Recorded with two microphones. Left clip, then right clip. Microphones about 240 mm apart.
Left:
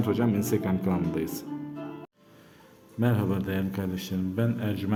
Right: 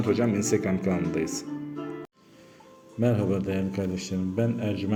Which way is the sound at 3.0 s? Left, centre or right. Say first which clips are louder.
Right 3 dB; centre.